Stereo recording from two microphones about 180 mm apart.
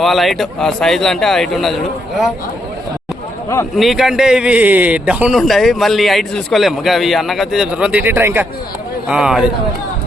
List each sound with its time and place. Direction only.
0.0 s a man's voice: centre (ahead or behind)
3.8 s a man's voice: centre (ahead or behind)